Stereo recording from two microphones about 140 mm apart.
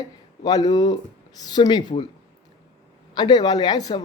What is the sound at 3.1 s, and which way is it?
Speech, 30° left (ahead or behind).